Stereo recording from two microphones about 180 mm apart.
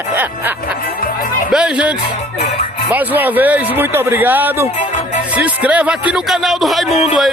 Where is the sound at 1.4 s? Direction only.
5° right (ahead or behind).